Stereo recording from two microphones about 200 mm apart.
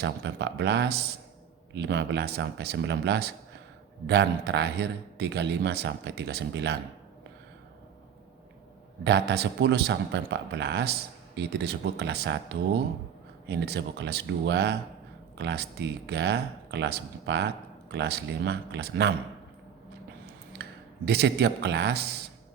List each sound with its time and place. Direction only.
0.0 s speech: 60° right (ahead or behind)
9.0 s speech: 55° right (ahead or behind)
20.6 s speech: 55° right (ahead or behind)